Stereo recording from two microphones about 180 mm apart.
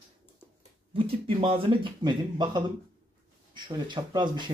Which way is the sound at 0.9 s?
30° right (ahead or behind).